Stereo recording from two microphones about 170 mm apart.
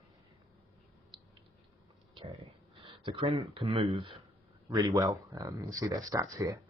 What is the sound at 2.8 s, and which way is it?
Speech, 30° right (ahead or behind).